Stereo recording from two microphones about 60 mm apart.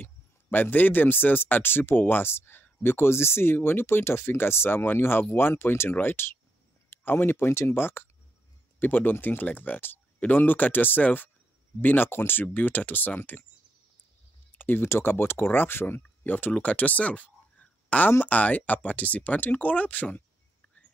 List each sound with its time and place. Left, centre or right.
0.0 s speech: left
14.6 s a sound: left
14.9 s speech: left